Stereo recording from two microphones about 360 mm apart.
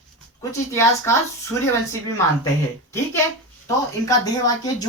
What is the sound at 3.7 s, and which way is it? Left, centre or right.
A woman's voice, centre.